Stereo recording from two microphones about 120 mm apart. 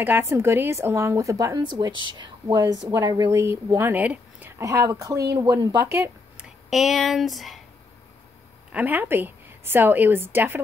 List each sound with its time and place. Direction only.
0.0 s speech: 20° right (ahead or behind); by 3.3 s 35° right (ahead or behind)
3.3 s speech: 25° right (ahead or behind)
5.9 s speech: 20° right (ahead or behind)
6.3 s speech: centre (ahead or behind)
8.7 s a woman's voice: 15° right (ahead or behind)